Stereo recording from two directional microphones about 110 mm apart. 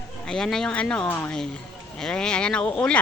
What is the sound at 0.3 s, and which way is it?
Speech, 5° left (ahead or behind).